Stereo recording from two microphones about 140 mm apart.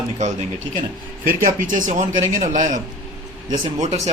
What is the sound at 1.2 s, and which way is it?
Speech, 85° right.